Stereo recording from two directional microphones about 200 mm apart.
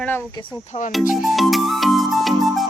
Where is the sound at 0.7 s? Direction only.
40° left (ahead or behind).